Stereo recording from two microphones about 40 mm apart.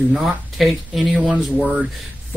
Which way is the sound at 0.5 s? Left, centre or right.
Centre.